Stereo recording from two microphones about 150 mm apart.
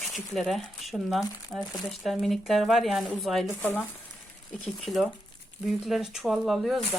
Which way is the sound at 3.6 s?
15° left (ahead or behind).